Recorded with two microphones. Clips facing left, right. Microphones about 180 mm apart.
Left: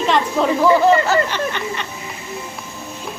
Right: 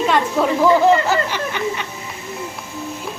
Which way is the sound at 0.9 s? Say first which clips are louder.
Left 1 dB; 15° right (ahead or behind).